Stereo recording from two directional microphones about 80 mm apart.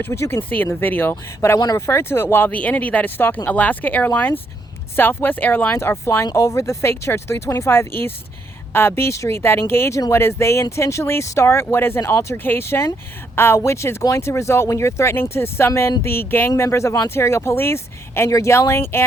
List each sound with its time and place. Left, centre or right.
0.0 s speech: left
1.1 s a woman's voice: left